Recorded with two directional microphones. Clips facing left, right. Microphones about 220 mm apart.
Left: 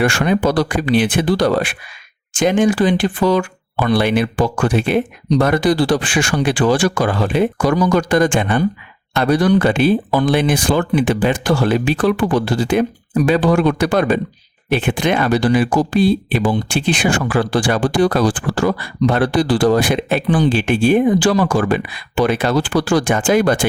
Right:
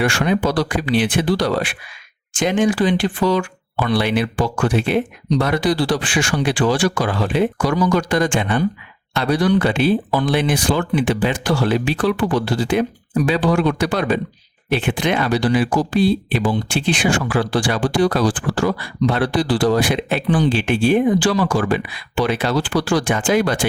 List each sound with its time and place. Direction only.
0.0 s speech: 50° left (ahead or behind)